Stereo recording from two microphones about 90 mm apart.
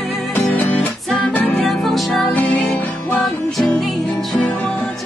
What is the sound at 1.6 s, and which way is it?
Music, centre (ahead or behind).